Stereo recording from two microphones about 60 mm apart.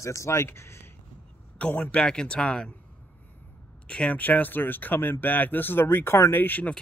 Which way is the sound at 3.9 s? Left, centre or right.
Left.